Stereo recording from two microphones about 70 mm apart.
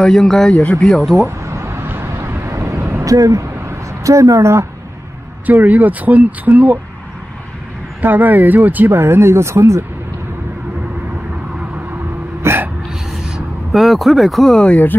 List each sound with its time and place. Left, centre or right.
0.0 s speech: centre
1.1 s vehicle: right
3.1 s speech: right
3.5 s a sound: right
5.5 s speech: right
8.0 s speech: right
12.4 s hiccup: right
13.1 s vehicle: centre
14.6 s speech: left